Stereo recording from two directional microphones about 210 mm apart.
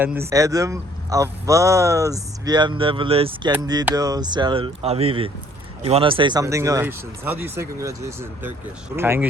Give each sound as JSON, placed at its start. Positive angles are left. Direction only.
{"t": 0.0, "sound": "a man's voice", "side_deg": -10}